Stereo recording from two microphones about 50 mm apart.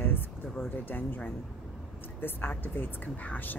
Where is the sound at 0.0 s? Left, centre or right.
Left.